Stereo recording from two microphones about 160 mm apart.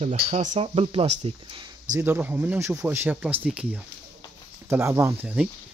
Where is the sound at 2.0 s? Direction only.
15° right (ahead or behind).